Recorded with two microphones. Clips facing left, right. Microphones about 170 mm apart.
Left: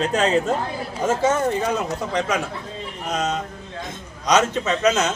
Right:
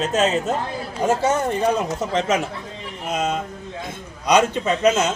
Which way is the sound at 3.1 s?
5° right (ahead or behind).